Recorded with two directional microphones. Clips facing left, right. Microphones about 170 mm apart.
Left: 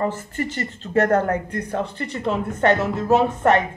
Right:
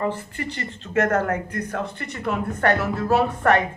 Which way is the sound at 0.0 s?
40° left (ahead or behind).